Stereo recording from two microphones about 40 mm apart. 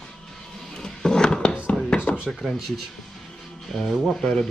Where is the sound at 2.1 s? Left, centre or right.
Left.